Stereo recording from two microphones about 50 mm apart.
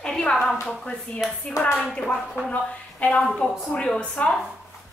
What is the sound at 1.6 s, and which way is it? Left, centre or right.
Speech, left.